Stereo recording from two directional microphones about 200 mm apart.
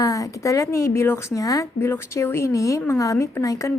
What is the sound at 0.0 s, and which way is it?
A woman's voice, 15° left (ahead or behind).